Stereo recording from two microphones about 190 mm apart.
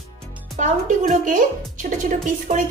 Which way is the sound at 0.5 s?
40° right (ahead or behind).